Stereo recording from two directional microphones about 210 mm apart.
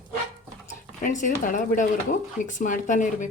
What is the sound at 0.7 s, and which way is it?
Speech, 35° left (ahead or behind).